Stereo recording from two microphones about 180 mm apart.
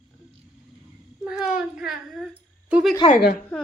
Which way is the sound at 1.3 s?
5° right (ahead or behind).